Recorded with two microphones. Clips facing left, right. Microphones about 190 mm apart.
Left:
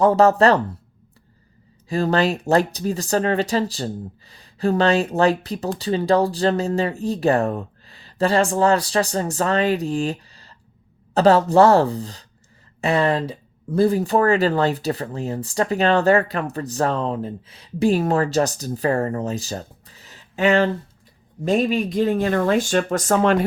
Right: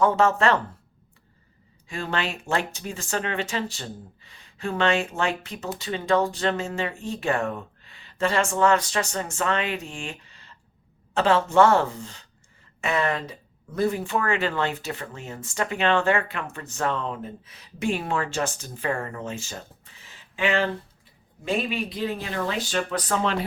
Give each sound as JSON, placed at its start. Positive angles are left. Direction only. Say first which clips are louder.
{"t": 0.0, "sound": "speech", "louder": "left 6 dB", "side_deg": 35}
{"t": 1.9, "sound": "speech", "louder": "left 10 dB", "side_deg": 35}